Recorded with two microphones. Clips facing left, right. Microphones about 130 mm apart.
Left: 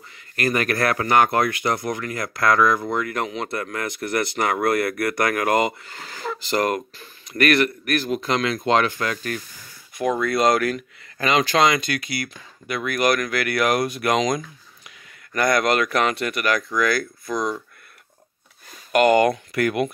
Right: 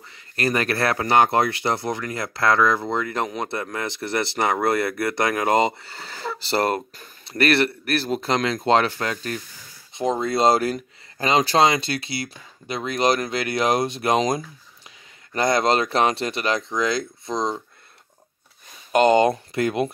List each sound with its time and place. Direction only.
0.4 s speech: 35° right (ahead or behind)
18.9 s speech: 25° right (ahead or behind)